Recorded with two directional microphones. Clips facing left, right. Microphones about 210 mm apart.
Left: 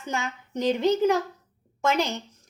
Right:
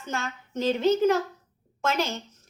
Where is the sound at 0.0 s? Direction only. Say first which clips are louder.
Left 2 dB; 15° left (ahead or behind).